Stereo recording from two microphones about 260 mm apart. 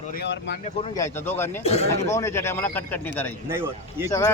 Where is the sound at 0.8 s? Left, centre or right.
Centre.